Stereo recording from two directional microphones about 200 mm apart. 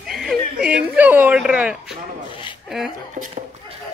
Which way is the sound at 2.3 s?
25° left (ahead or behind).